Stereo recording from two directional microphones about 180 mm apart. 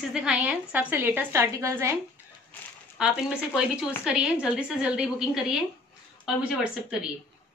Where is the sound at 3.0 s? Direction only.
5° right (ahead or behind).